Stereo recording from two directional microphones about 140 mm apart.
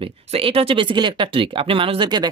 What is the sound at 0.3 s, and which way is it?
Speech, 40° right (ahead or behind).